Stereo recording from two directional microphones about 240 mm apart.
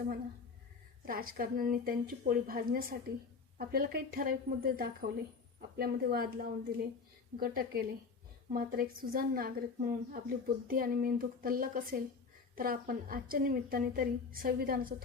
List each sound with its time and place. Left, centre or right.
1.0 s a woman's voice: right